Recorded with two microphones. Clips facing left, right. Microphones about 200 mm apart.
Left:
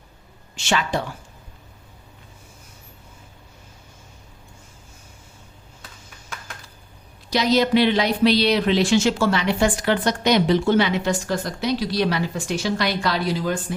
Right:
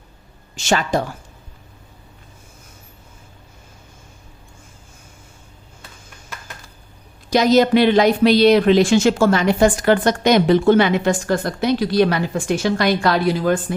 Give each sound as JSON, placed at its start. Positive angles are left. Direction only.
{"t": 0.5, "sound": "speech", "side_deg": -45}
{"t": 7.3, "sound": "speech", "side_deg": -45}